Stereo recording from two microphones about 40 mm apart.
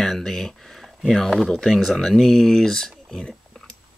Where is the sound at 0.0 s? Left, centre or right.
Centre.